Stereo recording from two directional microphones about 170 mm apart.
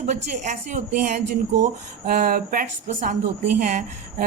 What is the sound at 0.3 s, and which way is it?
A woman's voice, 50° right (ahead or behind).